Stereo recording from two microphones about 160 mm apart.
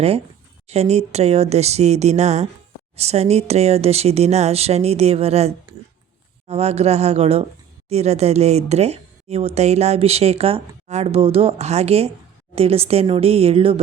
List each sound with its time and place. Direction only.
0.7 s speech: 40° right (ahead or behind)